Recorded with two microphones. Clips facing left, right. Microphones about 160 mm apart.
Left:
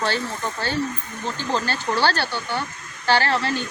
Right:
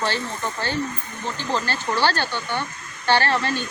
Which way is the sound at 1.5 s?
5° left (ahead or behind).